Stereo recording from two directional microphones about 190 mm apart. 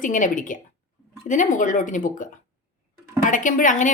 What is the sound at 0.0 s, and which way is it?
A woman's voice, 45° left (ahead or behind).